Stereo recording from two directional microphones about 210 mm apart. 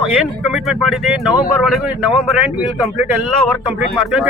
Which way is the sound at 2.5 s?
Centre (ahead or behind).